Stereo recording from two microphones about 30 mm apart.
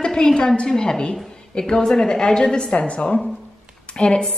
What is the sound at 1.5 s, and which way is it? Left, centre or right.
Speech, left.